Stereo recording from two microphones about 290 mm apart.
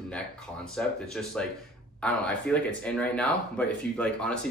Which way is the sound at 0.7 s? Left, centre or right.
Centre.